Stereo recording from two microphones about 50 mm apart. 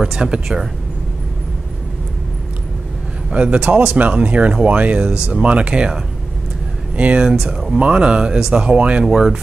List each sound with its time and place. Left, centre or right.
0.0 s speech: centre
3.3 s speech: right
7.0 s speech: right
8.6 s speech: right
9.1 s speech: centre